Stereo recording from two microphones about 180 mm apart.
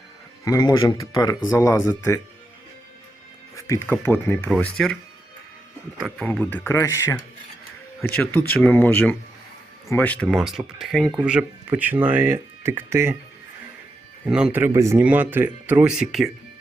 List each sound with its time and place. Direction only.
0.4 s speech: 20° left (ahead or behind)
3.5 s speech: 15° left (ahead or behind)
6.0 s speech: 5° left (ahead or behind); by 13.1 s 15° right (ahead or behind)
14.3 s speech: 5° right (ahead or behind)